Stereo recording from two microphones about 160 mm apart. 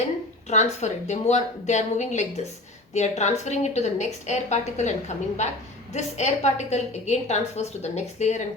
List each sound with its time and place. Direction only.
0.4 s a woman's voice: 45° left (ahead or behind)